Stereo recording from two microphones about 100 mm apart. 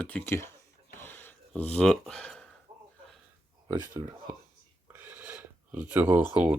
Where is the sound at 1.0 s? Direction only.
20° left (ahead or behind).